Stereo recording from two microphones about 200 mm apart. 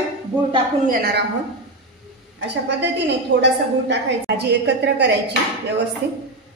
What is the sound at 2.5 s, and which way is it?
A woman's voice, 60° right (ahead or behind).